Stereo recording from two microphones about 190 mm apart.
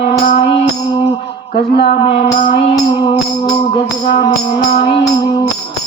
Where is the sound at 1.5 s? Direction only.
60° left (ahead or behind).